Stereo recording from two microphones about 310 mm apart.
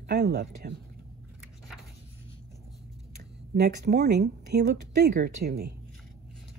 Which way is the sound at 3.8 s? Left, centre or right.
Right.